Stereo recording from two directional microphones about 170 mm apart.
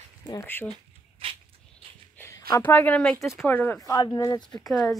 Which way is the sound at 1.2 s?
35° right (ahead or behind).